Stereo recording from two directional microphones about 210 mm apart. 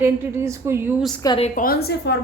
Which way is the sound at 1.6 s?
45° left (ahead or behind).